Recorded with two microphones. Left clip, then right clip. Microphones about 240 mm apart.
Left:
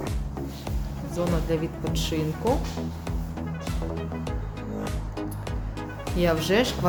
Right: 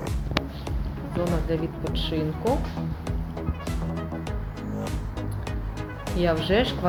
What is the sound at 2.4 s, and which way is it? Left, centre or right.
Speech, centre.